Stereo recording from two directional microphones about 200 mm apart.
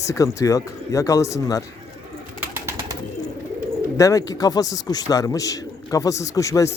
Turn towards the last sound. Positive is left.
turn(degrees=15)  # may be behind; listen again after turning